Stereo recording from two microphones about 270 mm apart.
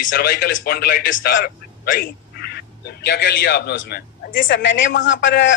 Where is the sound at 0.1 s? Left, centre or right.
Left.